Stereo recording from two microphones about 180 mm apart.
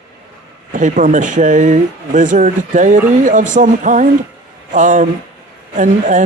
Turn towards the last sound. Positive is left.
turn(degrees=-45)  # may be behind; listen again after turning